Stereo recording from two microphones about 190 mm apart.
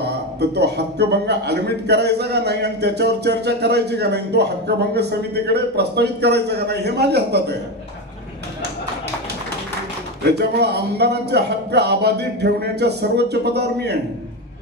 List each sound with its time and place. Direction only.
0.0 s a man's voice: 60° right (ahead or behind)
10.2 s a man's voice: 60° right (ahead or behind)